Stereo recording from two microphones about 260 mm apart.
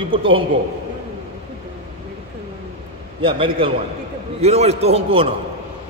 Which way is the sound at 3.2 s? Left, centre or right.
Right.